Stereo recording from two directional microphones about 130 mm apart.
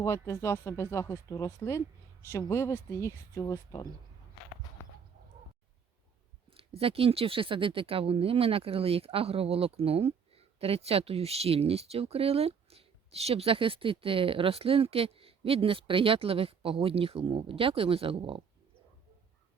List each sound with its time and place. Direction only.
0.0 s speech: 25° left (ahead or behind)
6.6 s speech: 45° right (ahead or behind)